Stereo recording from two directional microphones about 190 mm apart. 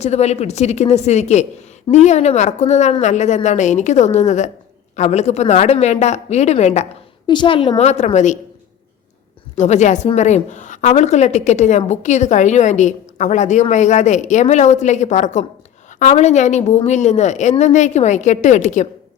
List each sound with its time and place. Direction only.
0.0 s a woman's voice: 35° left (ahead or behind)
7.3 s a woman's voice: 25° left (ahead or behind)
9.6 s a woman's voice: 40° left (ahead or behind)